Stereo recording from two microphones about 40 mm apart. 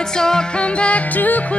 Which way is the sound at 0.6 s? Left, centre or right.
Left.